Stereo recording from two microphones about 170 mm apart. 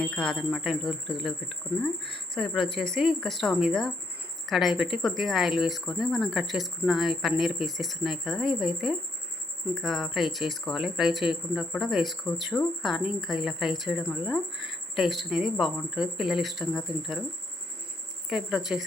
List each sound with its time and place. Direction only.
0.0 s a woman's voice: 5° left (ahead or behind)
2.0 s speech: 80° right
2.3 s a woman's voice: 5° left (ahead or behind)
18.3 s a woman's voice: 5° right (ahead or behind)